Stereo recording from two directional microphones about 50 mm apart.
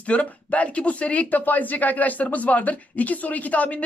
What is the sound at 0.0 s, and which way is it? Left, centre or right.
Speech, left.